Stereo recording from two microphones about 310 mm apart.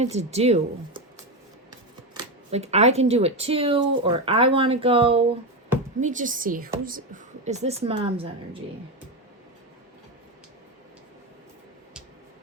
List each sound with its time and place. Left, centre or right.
0.0 s speech: right
2.1 s speech: right